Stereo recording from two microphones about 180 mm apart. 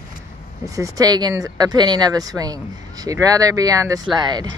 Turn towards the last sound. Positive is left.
turn(degrees=-25)  # may be behind; listen again after turning